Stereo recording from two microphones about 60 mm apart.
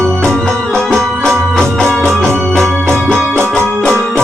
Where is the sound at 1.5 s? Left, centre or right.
Centre.